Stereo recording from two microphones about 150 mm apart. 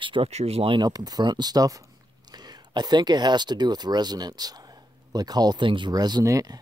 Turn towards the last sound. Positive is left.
turn(degrees=-25)  # may be behind; listen again after turning